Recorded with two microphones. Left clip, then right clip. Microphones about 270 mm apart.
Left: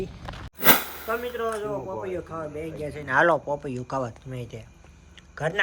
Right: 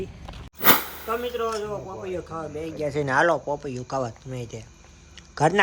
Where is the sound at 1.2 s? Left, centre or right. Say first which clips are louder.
Right 2 dB; centre.